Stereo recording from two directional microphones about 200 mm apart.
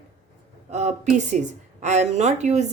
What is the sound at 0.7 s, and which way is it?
A woman's voice, 35° right (ahead or behind).